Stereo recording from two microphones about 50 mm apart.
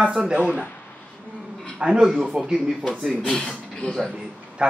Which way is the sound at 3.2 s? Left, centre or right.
Centre.